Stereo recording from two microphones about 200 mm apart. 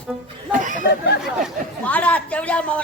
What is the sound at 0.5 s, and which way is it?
Speech, 40° right (ahead or behind).